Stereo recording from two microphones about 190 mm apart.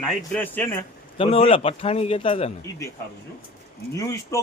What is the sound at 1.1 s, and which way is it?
Speech, 30° left (ahead or behind).